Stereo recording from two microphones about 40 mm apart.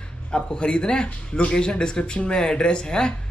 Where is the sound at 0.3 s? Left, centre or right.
Left.